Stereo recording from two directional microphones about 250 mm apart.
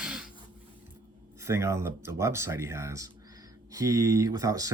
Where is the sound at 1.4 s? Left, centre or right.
Centre.